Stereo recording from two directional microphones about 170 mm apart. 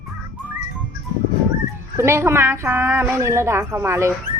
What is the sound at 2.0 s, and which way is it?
A woman's voice, 15° right (ahead or behind).